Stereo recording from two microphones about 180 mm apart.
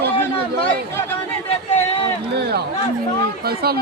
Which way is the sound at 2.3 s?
65° right (ahead or behind).